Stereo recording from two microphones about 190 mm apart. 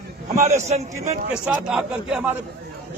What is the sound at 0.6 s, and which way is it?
Speech, 35° right (ahead or behind).